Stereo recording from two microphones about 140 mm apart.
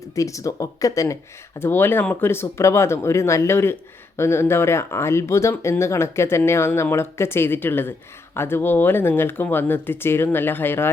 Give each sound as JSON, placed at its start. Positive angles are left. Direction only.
{"t": 0.2, "sound": "speech", "side_deg": 20}